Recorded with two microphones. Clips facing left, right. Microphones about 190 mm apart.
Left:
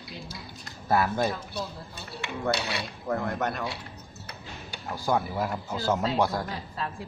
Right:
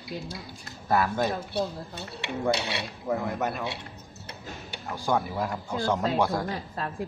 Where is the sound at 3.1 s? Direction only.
10° right (ahead or behind).